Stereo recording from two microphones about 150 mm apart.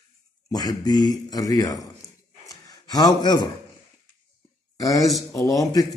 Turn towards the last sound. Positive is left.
turn(degrees=25)  # may be behind; listen again after turning